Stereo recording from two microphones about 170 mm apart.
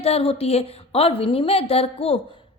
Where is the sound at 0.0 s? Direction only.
35° left (ahead or behind).